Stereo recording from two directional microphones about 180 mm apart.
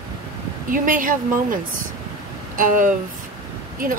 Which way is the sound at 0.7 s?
50° right (ahead or behind).